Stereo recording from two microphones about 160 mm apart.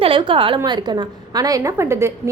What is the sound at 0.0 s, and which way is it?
A woman's voice, 30° right (ahead or behind).